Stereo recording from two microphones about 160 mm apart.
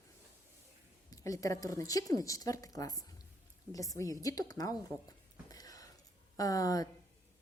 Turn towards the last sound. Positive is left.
turn(degrees=20)  # may be behind; listen again after turning